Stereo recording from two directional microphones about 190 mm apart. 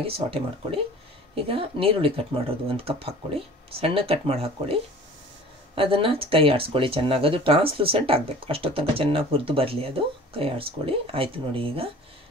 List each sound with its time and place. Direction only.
0.0 s speech: 30° right (ahead or behind)
5.8 s speech: 30° right (ahead or behind)